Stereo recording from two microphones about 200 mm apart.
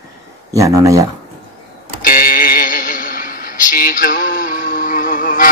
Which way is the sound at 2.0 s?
45° left (ahead or behind).